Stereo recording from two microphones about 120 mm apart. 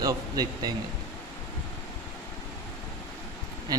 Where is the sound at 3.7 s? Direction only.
35° right (ahead or behind).